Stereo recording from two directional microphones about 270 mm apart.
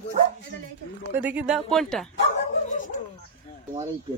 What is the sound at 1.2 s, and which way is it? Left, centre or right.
Speech, centre.